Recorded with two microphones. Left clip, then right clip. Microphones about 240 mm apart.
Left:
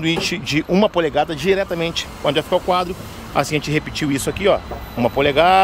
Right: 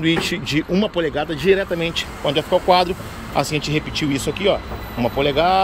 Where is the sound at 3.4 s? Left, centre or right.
Centre.